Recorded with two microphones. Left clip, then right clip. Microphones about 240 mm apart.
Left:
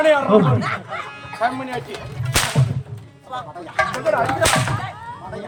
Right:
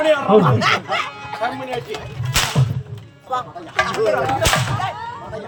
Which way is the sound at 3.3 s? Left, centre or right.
Centre.